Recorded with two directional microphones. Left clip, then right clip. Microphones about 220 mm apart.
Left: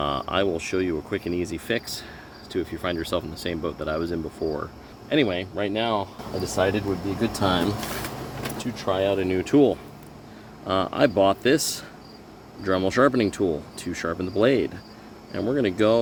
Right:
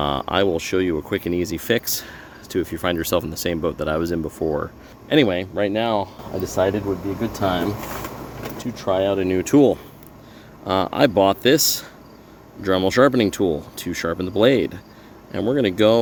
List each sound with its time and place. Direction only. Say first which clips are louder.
0.0 s speech: right 4 dB; 45° right (ahead or behind)
8.5 s speech: right 4 dB; 50° right (ahead or behind)
10.7 s speech: right 3 dB; 40° right (ahead or behind)